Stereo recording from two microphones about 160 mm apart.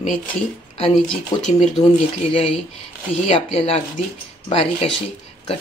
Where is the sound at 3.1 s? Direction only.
40° left (ahead or behind).